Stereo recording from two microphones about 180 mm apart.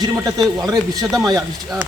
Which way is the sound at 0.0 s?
20° right (ahead or behind).